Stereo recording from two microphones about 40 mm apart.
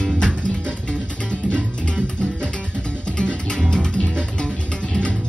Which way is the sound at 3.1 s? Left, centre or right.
Left.